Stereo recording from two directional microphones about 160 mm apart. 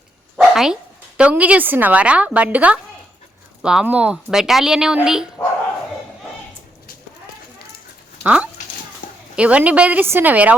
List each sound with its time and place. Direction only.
0.3 s speech: 5° right (ahead or behind)
8.2 s dog: 10° right (ahead or behind)
9.3 s a woman's voice: 5° right (ahead or behind)